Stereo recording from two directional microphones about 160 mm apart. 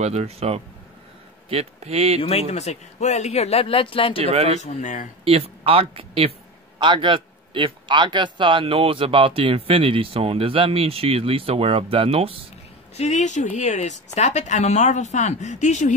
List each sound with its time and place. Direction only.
0.0 s speech: 40° right (ahead or behind)
2.5 s speech: 45° left (ahead or behind)
4.2 s speech: 40° right (ahead or behind)
4.6 s a woman's voice: 50° left (ahead or behind)
5.2 s speech: 40° right (ahead or behind)
12.9 s a woman's voice: 45° left (ahead or behind)